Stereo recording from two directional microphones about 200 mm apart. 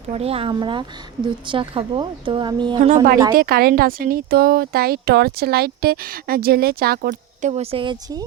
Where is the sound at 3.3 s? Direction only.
50° right (ahead or behind); by 8.2 s 20° right (ahead or behind).